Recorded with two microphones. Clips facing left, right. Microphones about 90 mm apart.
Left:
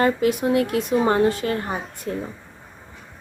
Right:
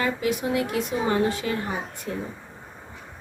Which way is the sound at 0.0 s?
50° left (ahead or behind).